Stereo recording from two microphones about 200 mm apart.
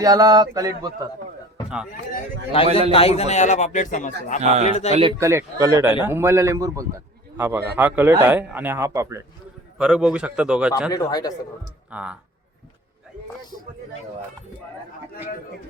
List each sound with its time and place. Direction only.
0.0 s a man's voice: 15° right (ahead or behind)
2.9 s speech: 30° left (ahead or behind)
4.4 s speech: 35° right (ahead or behind)
4.6 s speech: 35° left (ahead or behind)
4.9 s speech: 30° right (ahead or behind)
5.2 s a man's voice: 15° right (ahead or behind)
9.7 s a man's voice: 5° right (ahead or behind)
10.9 s speech: 20° left (ahead or behind)
11.9 s a man's voice: 5° right (ahead or behind)